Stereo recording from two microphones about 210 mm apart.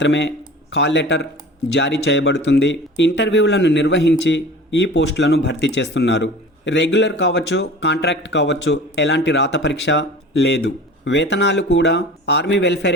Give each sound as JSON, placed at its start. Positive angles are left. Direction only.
{"t": 0.0, "sound": "speech", "side_deg": 60}